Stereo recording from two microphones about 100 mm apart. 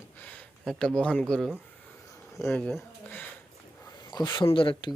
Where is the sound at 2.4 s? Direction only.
30° left (ahead or behind).